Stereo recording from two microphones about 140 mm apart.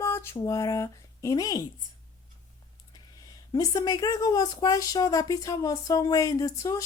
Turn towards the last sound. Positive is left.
turn(degrees=25)  # may be behind; listen again after turning